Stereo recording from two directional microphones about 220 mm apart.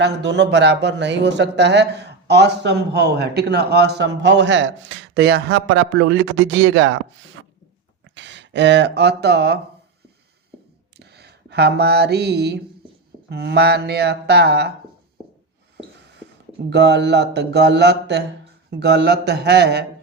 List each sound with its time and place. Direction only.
0.0 s speech: 50° right (ahead or behind)
10.9 s a sound: 50° right (ahead or behind)
13.3 s speech: 50° right (ahead or behind)
16.6 s speech: 50° right (ahead or behind)